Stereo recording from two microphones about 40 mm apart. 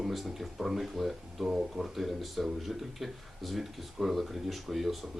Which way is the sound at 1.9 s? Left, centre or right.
Centre.